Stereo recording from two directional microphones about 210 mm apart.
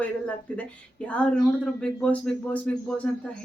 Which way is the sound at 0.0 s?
5° left (ahead or behind).